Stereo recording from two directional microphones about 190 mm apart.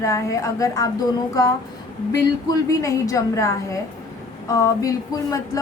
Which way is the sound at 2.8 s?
15° left (ahead or behind).